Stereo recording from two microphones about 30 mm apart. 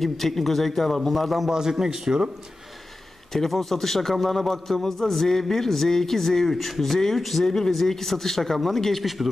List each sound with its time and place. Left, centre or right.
0.0 s a man's voice: centre
1.5 s a man's voice: centre
3.3 s a man's voice: centre
7.4 s a man's voice: centre
9.0 s speech: centre